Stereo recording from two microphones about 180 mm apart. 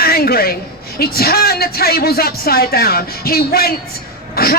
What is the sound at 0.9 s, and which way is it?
A man's voice, 55° left (ahead or behind).